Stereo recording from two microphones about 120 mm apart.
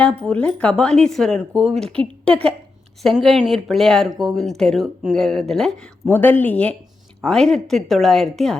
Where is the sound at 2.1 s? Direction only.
50° right (ahead or behind).